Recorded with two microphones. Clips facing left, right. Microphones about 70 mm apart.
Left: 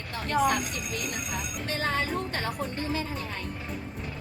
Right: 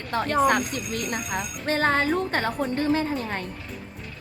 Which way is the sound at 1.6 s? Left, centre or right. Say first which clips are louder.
Right 8 dB; right.